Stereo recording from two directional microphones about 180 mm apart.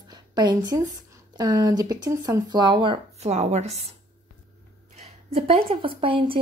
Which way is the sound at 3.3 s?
40° right (ahead or behind).